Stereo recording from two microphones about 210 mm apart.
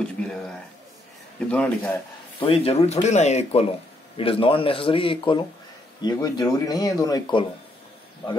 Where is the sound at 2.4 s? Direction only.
25° left (ahead or behind).